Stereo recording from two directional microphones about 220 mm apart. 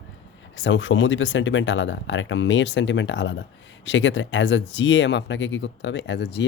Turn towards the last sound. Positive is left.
turn(degrees=50)  # may be behind; listen again after turning